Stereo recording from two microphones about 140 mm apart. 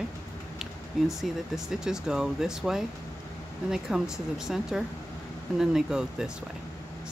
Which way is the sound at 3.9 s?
5° right (ahead or behind).